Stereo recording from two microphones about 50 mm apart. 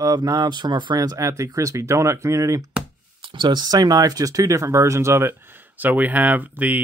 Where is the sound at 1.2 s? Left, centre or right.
Right.